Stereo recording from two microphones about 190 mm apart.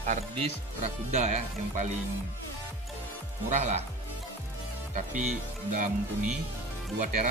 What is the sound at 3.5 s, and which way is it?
Speech, 40° right (ahead or behind).